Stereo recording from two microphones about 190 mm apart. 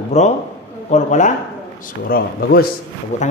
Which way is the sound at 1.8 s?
50° left (ahead or behind).